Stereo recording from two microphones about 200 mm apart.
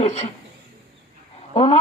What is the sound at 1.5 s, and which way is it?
Speech, 30° left (ahead or behind).